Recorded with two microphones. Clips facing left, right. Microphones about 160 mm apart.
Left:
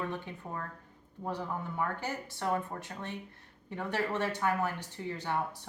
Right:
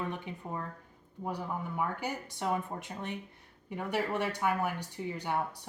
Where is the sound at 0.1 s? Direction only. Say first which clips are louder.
Right 1 dB; 15° right (ahead or behind).